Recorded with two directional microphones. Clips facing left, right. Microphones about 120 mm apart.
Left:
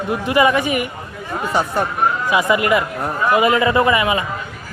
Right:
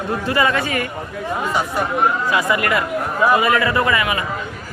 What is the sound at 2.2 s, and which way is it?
A man's voice, 15° left (ahead or behind).